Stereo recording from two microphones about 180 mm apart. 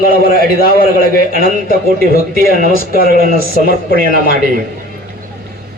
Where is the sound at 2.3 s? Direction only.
50° right (ahead or behind).